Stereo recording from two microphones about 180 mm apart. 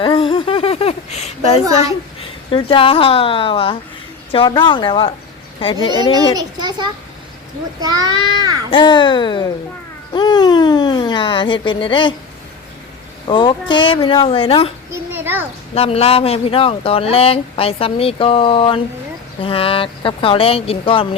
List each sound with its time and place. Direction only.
0.0 s a sound: 30° left (ahead or behind)
2.5 s speech: 30° left (ahead or behind)
6.3 s a child's voice: 25° right (ahead or behind)
8.7 s speech: 25° left (ahead or behind)
13.2 s speech: 25° left (ahead or behind)
15.1 s a child's voice: 10° right (ahead or behind)
15.7 s speech: 35° left (ahead or behind)